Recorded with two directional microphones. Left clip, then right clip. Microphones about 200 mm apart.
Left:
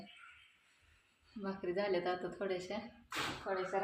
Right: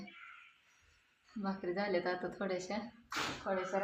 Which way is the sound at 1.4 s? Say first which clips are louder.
Even; 10° right (ahead or behind).